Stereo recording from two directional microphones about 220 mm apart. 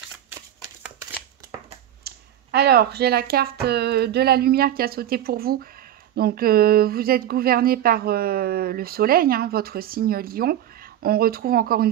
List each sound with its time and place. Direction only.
2.0 s speech: 45° right (ahead or behind)